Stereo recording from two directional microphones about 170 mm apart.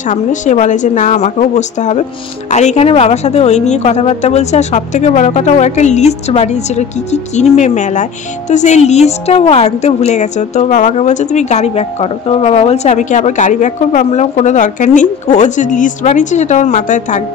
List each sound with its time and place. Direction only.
0.1 s a woman's voice: 45° left (ahead or behind)